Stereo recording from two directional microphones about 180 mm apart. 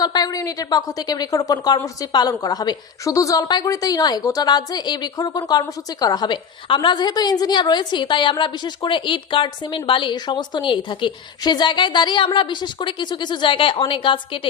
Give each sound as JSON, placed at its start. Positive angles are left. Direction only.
{"t": 0.0, "sound": "a woman's voice", "side_deg": 20}